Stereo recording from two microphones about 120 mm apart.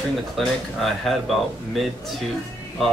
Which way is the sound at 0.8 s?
Centre (ahead or behind).